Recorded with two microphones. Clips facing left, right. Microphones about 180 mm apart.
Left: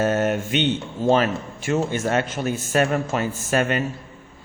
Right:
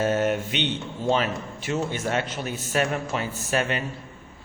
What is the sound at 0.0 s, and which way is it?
A man's voice, 50° left (ahead or behind).